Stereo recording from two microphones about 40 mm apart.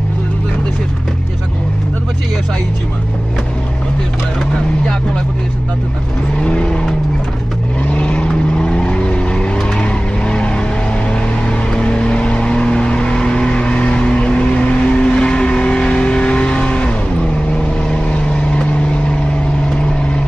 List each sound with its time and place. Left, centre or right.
6.4 s vehicle: left